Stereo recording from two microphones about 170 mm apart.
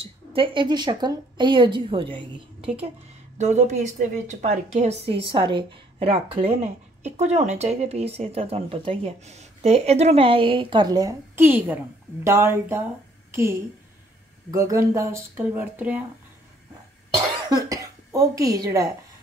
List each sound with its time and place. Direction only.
0.0 s a woman's voice: 30° right (ahead or behind)
3.3 s a woman's voice: 40° right (ahead or behind); by 16.0 s 10° right (ahead or behind)
17.5 s a sound: 20° right (ahead or behind)